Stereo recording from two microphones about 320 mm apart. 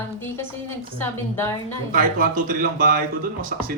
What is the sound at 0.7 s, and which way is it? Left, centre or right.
Speech, centre.